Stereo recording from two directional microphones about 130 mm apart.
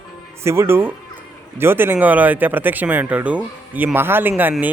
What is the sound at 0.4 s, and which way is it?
A man's voice, 20° right (ahead or behind).